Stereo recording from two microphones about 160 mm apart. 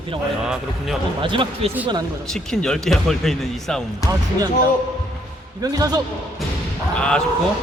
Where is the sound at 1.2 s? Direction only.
30° right (ahead or behind).